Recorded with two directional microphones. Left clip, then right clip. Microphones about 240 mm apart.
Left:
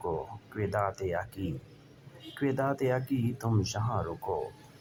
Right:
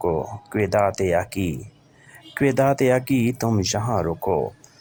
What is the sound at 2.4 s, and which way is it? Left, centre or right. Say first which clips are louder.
Speech: right 11 dB; right.